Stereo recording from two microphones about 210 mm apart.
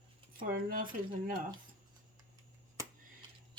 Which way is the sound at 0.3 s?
40° right (ahead or behind).